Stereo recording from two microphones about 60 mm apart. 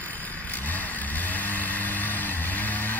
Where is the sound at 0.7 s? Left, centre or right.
Left.